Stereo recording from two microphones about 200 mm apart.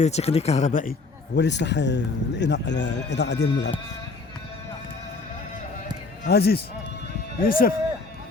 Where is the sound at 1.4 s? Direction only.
60° left (ahead or behind).